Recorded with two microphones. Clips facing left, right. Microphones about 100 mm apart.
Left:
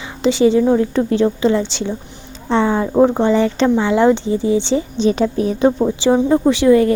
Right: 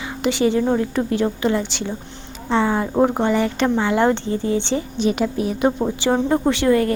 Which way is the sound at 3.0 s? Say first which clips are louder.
Left 4 dB; 10° right (ahead or behind).